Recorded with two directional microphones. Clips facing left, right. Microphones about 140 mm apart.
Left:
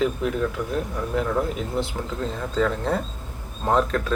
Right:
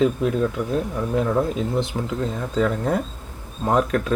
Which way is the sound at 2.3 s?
10° right (ahead or behind).